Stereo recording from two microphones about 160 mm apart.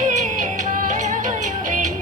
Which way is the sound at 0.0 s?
50° right (ahead or behind).